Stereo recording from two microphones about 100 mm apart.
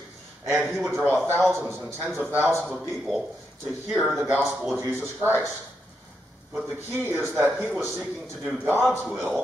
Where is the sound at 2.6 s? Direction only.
Centre (ahead or behind).